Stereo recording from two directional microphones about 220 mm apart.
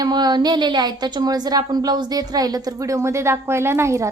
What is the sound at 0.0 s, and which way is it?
A woman's voice, 20° right (ahead or behind).